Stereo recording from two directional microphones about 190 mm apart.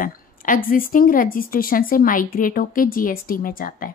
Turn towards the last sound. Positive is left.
turn(degrees=45)  # may be behind; listen again after turning